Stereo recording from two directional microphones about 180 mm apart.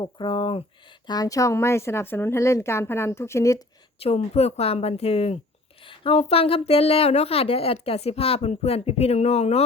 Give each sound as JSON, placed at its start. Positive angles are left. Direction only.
{"t": 0.0, "sound": "a woman's voice", "side_deg": 25}
{"t": 4.0, "sound": "speech", "side_deg": 35}